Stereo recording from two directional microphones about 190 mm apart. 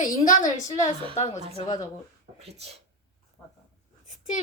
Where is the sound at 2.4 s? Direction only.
35° right (ahead or behind).